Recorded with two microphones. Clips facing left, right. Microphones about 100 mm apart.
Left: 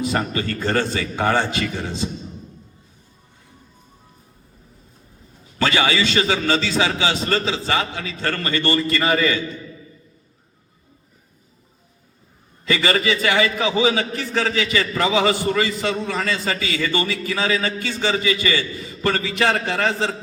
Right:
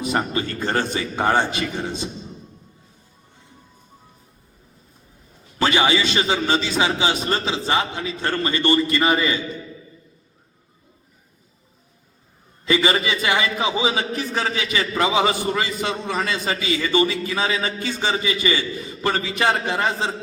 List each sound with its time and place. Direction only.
0.0 s a man's voice: 20° right (ahead or behind)
5.5 s a man's voice: 20° right (ahead or behind)
12.6 s a man's voice: 20° right (ahead or behind)